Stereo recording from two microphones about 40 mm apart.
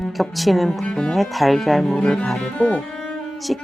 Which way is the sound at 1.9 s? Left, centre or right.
Centre.